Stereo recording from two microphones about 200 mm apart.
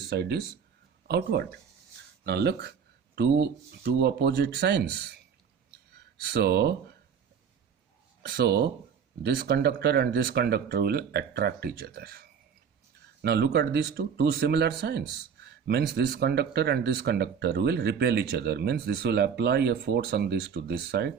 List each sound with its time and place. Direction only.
0.1 s speech: 55° right (ahead or behind)
6.2 s speech: 55° right (ahead or behind)
8.4 s speech: 55° right (ahead or behind)
13.2 s speech: 55° right (ahead or behind)